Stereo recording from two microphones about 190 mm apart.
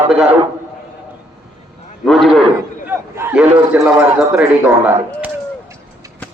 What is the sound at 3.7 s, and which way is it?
Speech, 10° right (ahead or behind).